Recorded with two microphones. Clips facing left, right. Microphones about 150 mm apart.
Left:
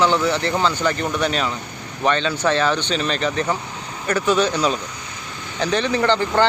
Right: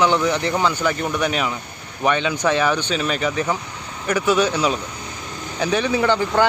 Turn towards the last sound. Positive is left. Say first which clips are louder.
# even
turn(degrees=-10)  # may be behind; listen again after turning